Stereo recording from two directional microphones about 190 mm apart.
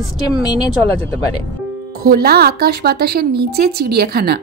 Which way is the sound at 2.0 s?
55° right (ahead or behind).